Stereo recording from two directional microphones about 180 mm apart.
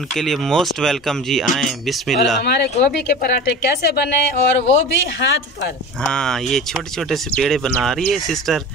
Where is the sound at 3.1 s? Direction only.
50° left (ahead or behind).